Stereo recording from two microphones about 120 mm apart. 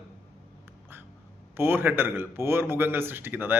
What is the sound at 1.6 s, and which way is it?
A man's voice, 20° right (ahead or behind).